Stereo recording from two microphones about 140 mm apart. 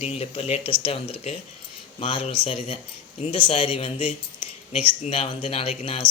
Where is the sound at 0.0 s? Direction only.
45° left (ahead or behind).